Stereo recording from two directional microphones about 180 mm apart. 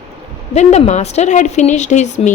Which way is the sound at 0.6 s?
40° left (ahead or behind).